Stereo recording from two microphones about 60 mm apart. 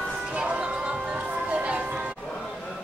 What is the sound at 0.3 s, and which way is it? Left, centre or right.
Music, centre.